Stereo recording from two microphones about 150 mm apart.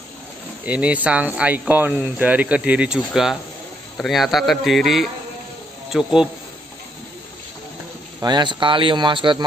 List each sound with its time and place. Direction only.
0.7 s a man's voice: 10° right (ahead or behind)
8.2 s speech: 30° right (ahead or behind)